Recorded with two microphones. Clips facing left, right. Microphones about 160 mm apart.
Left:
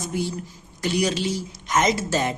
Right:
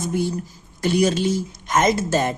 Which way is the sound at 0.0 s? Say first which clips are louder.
Right 4 dB; 55° right (ahead or behind).